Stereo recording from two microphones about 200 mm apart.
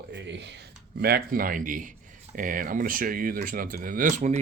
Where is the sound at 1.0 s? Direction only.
50° right (ahead or behind).